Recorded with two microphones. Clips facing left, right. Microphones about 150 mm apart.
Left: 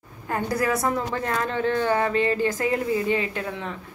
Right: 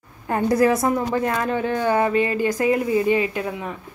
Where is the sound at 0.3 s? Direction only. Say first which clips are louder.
Right 6 dB; 20° right (ahead or behind).